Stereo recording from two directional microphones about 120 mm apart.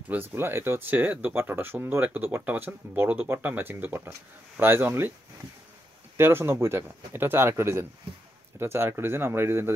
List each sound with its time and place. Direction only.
0.1 s speech: 15° right (ahead or behind)
6.1 s speech: 20° right (ahead or behind)